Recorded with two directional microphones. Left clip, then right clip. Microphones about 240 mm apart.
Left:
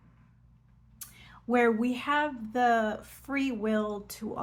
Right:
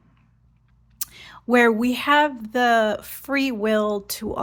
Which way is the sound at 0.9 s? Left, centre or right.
Right.